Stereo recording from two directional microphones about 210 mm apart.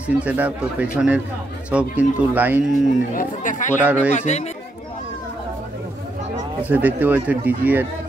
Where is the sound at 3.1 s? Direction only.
40° left (ahead or behind).